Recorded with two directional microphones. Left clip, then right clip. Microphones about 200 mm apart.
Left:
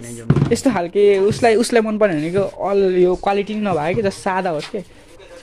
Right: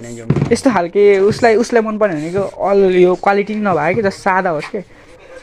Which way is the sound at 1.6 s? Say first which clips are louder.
Right 2 dB; 10° left (ahead or behind).